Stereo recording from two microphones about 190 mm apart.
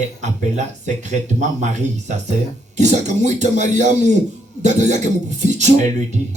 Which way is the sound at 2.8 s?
40° right (ahead or behind).